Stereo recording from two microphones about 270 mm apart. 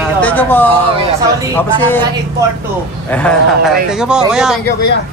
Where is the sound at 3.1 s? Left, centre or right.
Centre.